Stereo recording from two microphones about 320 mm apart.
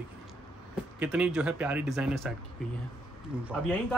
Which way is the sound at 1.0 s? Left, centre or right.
Centre.